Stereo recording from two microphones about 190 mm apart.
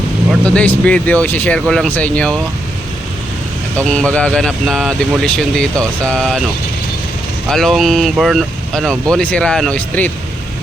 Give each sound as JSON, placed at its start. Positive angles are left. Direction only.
{"t": 0.4, "sound": "speech", "side_deg": 5}
{"t": 3.8, "sound": "speech", "side_deg": 5}
{"t": 7.5, "sound": "speech", "side_deg": 0}